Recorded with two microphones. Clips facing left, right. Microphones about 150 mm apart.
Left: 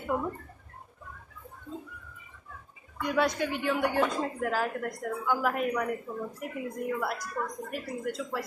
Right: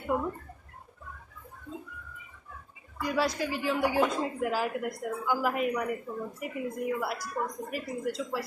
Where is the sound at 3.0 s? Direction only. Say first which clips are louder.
Left 1 dB; 5° right (ahead or behind).